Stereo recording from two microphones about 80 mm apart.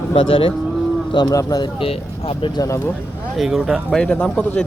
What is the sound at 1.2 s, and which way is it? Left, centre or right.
Speech, left.